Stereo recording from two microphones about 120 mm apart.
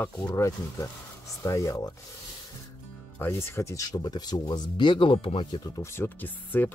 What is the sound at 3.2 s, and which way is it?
Speech, 20° left (ahead or behind).